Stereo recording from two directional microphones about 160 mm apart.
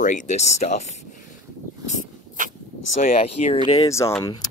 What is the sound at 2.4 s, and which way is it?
Vehicle, 55° right (ahead or behind).